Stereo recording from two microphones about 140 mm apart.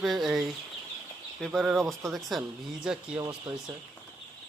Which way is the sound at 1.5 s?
Centre (ahead or behind).